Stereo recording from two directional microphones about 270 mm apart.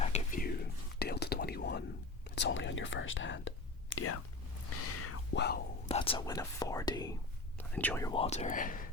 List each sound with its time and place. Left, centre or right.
0.0 s whispering: left
5.3 s whispering: left
5.9 s speech: centre